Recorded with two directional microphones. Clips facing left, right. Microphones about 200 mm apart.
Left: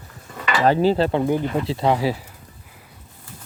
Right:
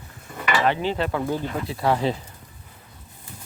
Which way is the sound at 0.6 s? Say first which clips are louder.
Left 10 dB; 40° left (ahead or behind).